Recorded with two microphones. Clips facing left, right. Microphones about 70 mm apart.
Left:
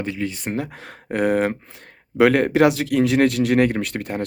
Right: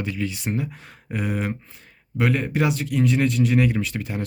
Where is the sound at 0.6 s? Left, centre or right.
Left.